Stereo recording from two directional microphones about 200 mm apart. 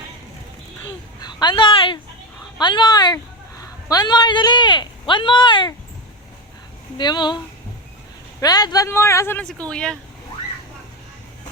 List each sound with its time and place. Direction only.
1.2 s a man's voice: 20° left (ahead or behind)
6.9 s speech: 20° left (ahead or behind)
8.4 s a man's voice: 20° left (ahead or behind)